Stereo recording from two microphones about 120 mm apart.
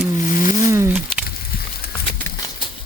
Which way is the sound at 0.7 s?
20° right (ahead or behind).